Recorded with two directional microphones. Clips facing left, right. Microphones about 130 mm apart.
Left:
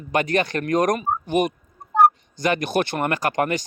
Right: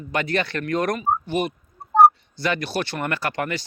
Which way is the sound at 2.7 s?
50° left (ahead or behind).